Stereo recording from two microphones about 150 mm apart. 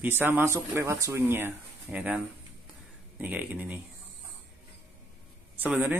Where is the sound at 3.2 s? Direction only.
10° right (ahead or behind).